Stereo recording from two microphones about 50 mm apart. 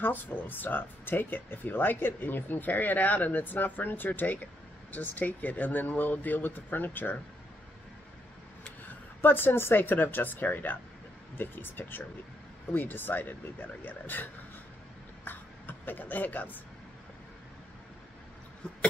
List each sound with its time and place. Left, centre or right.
0.0 s speech: left
8.6 s a woman's voice: left
15.2 s a sound: left